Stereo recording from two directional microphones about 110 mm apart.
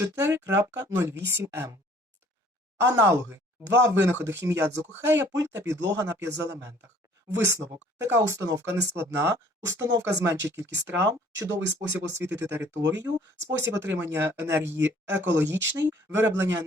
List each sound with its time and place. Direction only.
0.0 s speech: 25° right (ahead or behind)
2.7 s speech: 30° right (ahead or behind)
8.4 s speech: 35° right (ahead or behind)